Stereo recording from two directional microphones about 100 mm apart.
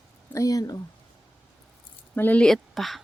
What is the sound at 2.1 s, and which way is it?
Speech, 20° left (ahead or behind).